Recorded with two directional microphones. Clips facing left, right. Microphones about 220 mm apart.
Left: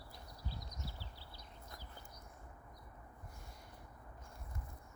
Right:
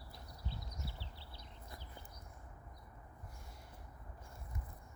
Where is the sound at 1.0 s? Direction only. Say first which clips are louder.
Even; 25° right (ahead or behind).